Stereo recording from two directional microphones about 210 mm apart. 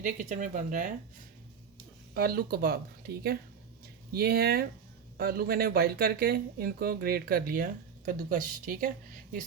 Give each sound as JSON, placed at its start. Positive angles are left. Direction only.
{"t": 0.0, "sound": "speech", "side_deg": -35}
{"t": 2.1, "sound": "speech", "side_deg": -45}
{"t": 4.1, "sound": "speech", "side_deg": -50}